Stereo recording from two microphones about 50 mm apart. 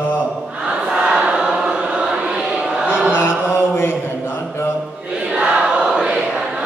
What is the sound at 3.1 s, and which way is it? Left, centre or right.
Mantra, left.